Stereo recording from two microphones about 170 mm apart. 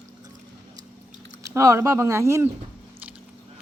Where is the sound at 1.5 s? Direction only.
15° right (ahead or behind).